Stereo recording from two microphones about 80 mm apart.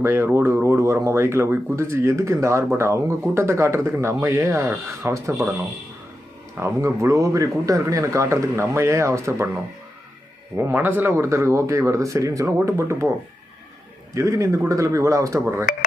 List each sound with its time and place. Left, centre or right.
0.0 s speech: right
6.6 s speech: right
10.6 s speech: right
11.3 s speech: right
14.1 s speech: right